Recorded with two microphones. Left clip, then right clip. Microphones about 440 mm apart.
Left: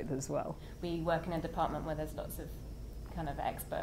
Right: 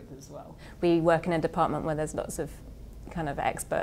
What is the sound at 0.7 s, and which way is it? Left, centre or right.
A woman's voice, right.